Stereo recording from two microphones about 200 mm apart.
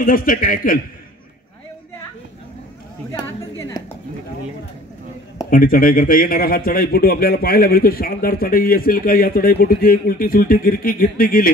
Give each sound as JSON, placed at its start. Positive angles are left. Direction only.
{"t": 0.0, "sound": "a man's voice", "side_deg": 45}
{"t": 3.2, "sound": "a sound", "side_deg": 20}
{"t": 5.5, "sound": "a man's voice", "side_deg": 45}